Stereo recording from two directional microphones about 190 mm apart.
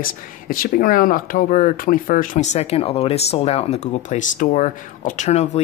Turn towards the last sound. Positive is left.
turn(degrees=35)  # may be behind; listen again after turning